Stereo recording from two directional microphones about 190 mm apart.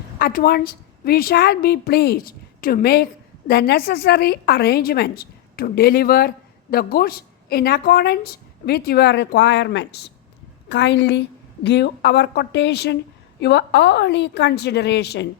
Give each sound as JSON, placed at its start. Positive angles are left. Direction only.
{"t": 0.2, "sound": "a woman's voice", "side_deg": 50}